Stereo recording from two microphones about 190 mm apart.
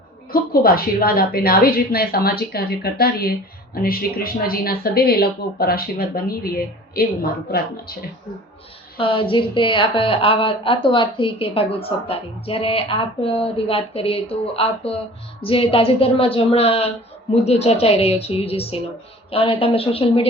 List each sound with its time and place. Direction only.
0.3 s a woman's voice: 50° left (ahead or behind)
9.0 s a woman's voice: 25° left (ahead or behind)